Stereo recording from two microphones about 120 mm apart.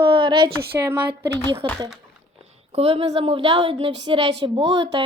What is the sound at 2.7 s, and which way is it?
Speech, 55° right (ahead or behind).